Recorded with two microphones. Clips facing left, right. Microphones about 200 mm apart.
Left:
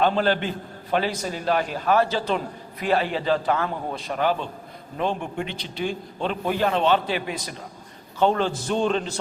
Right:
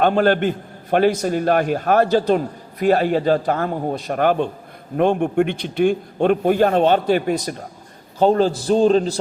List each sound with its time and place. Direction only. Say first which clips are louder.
0.0 s a man's voice: right 5 dB; 50° right (ahead or behind); by 9.1 s 35° right (ahead or behind)